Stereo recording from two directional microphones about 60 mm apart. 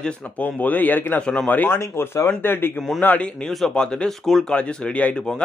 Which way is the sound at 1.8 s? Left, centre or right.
Left.